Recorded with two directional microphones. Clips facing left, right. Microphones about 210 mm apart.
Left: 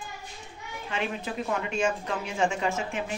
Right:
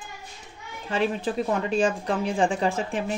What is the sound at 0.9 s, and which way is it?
A woman's voice, 35° right (ahead or behind).